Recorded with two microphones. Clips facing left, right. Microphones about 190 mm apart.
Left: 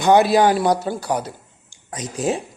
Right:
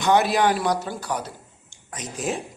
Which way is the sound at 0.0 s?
30° left (ahead or behind).